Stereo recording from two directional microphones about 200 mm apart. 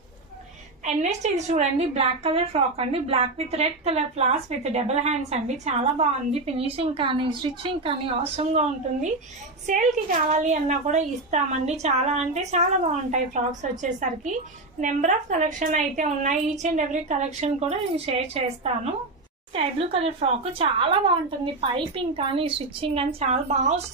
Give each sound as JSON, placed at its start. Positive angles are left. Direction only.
{"t": 0.8, "sound": "a woman's voice", "side_deg": -35}